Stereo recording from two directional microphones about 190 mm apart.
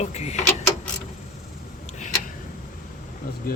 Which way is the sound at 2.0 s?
40° left (ahead or behind).